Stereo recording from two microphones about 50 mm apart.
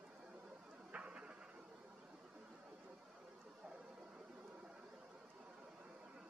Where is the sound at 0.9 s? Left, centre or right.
Right.